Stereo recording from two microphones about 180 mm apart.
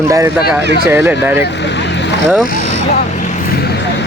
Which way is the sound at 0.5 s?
10° right (ahead or behind).